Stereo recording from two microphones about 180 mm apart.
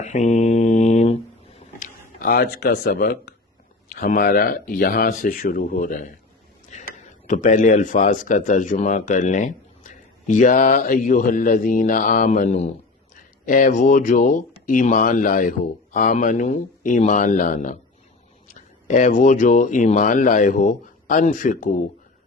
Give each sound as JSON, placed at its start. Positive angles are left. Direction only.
{"t": 0.0, "sound": "mantra", "side_deg": 40}
{"t": 3.9, "sound": "speech", "side_deg": 45}
{"t": 6.7, "sound": "a sound", "side_deg": 40}
{"t": 7.3, "sound": "speech", "side_deg": 45}